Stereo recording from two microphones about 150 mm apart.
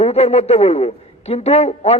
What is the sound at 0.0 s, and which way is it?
A man's voice, 45° left (ahead or behind).